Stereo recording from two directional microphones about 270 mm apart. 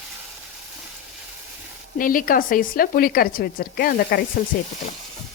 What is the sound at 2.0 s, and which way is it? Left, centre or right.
A woman's voice, left.